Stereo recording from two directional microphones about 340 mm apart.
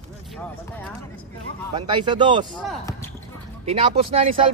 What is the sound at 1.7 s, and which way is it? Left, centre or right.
Speech, centre.